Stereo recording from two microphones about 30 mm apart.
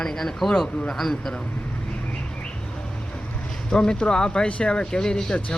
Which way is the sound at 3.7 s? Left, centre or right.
Left.